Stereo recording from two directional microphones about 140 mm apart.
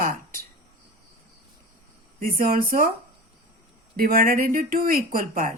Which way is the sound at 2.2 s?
85° right.